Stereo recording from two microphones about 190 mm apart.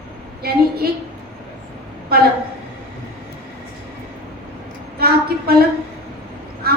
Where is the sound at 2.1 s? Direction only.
55° right (ahead or behind).